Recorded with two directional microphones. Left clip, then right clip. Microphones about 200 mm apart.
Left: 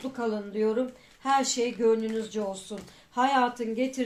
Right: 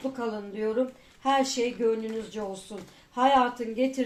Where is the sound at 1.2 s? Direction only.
45° left (ahead or behind).